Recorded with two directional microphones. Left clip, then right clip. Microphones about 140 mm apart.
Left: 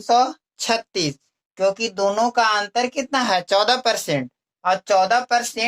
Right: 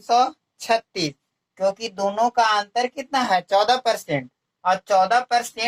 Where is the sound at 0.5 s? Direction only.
45° left (ahead or behind).